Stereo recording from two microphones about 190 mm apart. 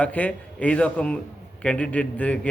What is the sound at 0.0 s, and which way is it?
A man's voice, 5° left (ahead or behind).